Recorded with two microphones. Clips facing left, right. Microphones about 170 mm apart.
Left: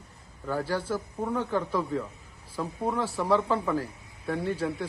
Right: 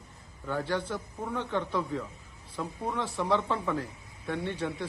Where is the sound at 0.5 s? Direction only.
35° left (ahead or behind).